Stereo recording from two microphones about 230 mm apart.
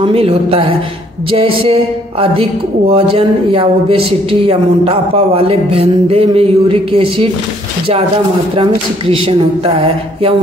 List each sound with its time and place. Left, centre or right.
0.0 s speech: right
9.1 s speech: right